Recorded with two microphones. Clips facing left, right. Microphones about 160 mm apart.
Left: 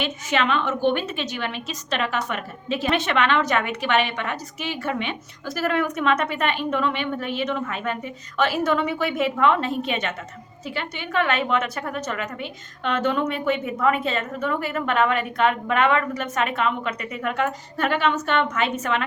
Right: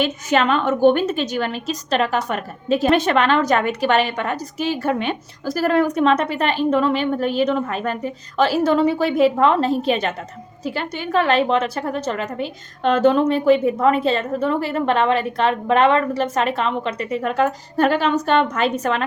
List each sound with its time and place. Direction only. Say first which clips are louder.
0.0 s a woman's voice: right 5 dB; 40° right (ahead or behind)